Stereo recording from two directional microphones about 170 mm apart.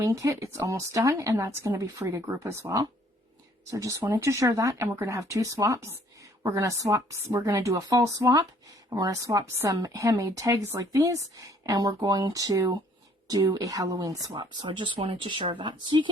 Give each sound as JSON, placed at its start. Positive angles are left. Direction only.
{"t": 0.0, "sound": "a woman's voice", "side_deg": -20}